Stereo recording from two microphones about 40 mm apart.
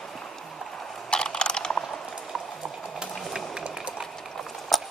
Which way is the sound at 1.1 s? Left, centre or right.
Left.